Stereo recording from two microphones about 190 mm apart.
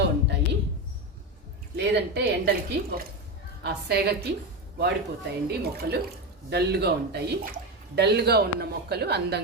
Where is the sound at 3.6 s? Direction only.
60° right (ahead or behind).